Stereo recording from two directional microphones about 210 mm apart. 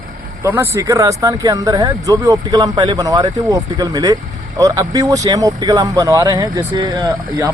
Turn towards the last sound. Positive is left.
turn(degrees=-15)  # may be behind; listen again after turning